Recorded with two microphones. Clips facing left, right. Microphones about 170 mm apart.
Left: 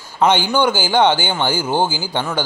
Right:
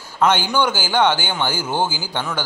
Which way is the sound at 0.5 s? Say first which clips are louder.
Left 3 dB; 10° left (ahead or behind).